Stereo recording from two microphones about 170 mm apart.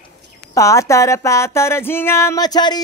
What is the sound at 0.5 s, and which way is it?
Music, 20° left (ahead or behind).